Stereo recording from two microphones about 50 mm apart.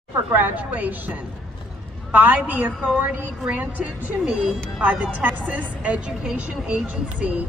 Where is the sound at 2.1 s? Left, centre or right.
Right.